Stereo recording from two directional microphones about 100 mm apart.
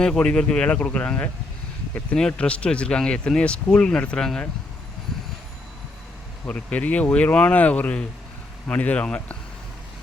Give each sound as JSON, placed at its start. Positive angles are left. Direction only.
{"t": 0.0, "sound": "speech", "side_deg": 10}
{"t": 6.4, "sound": "speech", "side_deg": 15}